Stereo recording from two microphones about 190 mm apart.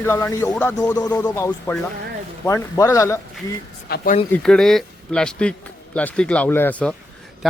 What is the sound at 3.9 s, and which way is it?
Speech, 55° left (ahead or behind).